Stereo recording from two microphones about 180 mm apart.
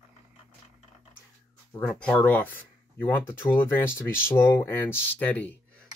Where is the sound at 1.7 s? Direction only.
5° left (ahead or behind).